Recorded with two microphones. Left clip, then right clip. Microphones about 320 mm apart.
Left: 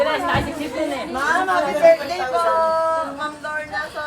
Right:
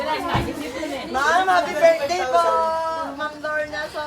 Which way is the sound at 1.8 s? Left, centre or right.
Right.